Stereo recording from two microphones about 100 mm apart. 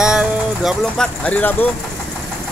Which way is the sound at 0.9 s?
10° left (ahead or behind).